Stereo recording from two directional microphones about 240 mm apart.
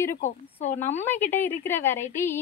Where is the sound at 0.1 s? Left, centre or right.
Left.